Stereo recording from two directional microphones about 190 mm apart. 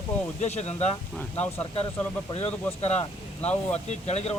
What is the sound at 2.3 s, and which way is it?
Speech, 30° left (ahead or behind).